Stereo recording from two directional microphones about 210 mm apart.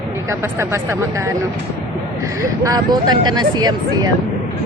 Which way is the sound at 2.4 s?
15° right (ahead or behind).